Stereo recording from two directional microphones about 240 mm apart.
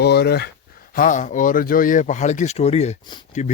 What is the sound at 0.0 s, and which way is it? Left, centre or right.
Speech, left.